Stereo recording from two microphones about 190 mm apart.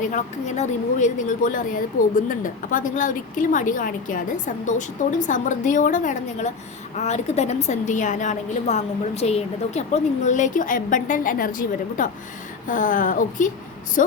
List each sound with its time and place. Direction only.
0.0 s a woman's voice: 40° left (ahead or behind)